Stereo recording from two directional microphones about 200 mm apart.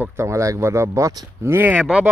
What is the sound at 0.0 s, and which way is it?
Speech, 10° right (ahead or behind).